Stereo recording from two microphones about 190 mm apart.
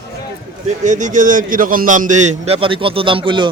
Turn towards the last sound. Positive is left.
turn(degrees=-25)  # may be behind; listen again after turning